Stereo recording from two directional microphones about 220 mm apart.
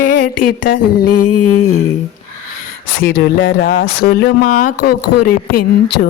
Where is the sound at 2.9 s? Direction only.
50° left (ahead or behind).